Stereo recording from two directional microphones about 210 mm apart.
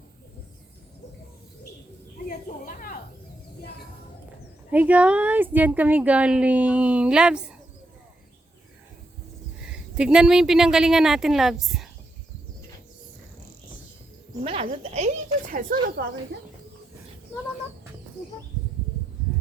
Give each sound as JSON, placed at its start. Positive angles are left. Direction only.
{"t": 2.7, "sound": "snake", "side_deg": 40}
{"t": 4.7, "sound": "a woman's voice", "side_deg": -10}
{"t": 9.6, "sound": "a woman's voice", "side_deg": -5}
{"t": 14.4, "sound": "speech", "side_deg": -25}
{"t": 16.0, "sound": "speech", "side_deg": -50}